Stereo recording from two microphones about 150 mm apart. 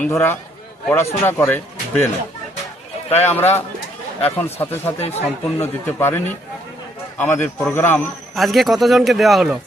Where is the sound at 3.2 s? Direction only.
15° left (ahead or behind).